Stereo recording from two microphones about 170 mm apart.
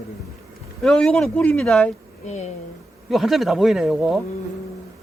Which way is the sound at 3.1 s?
Centre (ahead or behind).